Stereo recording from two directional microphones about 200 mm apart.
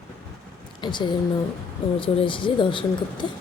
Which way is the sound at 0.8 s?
20° left (ahead or behind).